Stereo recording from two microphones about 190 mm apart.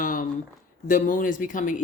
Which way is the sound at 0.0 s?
45° left (ahead or behind).